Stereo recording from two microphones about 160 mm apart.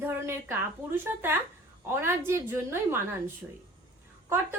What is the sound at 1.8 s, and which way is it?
Speech, 15° right (ahead or behind).